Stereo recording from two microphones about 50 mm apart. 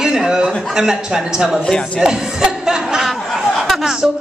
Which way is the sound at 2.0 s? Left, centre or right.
Centre.